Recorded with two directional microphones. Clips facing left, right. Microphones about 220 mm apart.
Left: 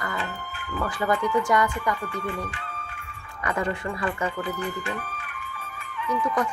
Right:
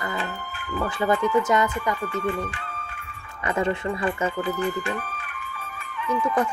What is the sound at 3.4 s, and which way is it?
Speech, 25° right (ahead or behind).